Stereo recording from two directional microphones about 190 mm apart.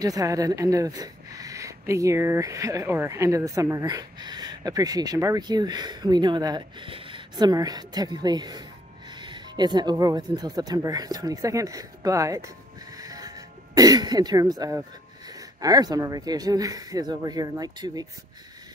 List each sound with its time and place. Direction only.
0.0 s speech: 20° right (ahead or behind)